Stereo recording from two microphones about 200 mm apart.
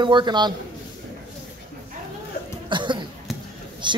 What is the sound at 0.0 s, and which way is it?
Speech, 25° right (ahead or behind).